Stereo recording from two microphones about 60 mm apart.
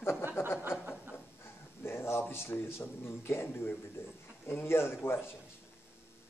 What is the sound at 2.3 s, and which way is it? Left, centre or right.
A man's voice, left.